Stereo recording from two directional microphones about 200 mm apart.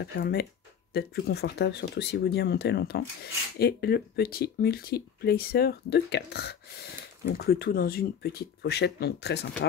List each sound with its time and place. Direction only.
0.0 s speech: 50° left (ahead or behind)